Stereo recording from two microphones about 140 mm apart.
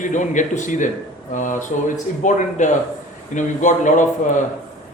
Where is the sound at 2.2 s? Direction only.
65° left (ahead or behind).